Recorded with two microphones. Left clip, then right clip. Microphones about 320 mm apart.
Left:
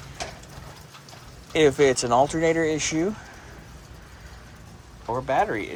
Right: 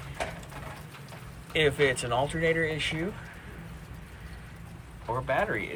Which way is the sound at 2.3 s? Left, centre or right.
Left.